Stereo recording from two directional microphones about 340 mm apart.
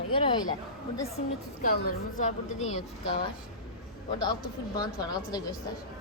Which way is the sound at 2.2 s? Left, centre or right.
Centre.